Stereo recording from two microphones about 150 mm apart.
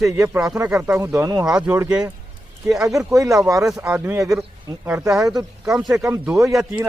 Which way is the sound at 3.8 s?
10° right (ahead or behind).